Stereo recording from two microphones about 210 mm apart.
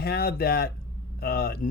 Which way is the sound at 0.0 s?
45° left (ahead or behind).